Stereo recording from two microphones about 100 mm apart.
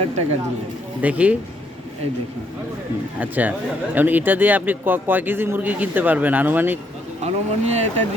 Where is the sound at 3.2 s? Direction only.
15° right (ahead or behind).